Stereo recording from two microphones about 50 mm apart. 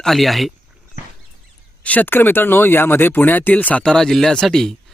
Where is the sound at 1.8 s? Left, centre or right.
Left.